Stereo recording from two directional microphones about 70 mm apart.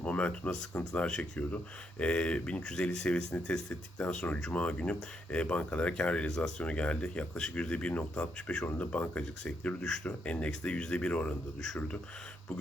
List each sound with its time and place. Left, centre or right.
0.0 s speech: centre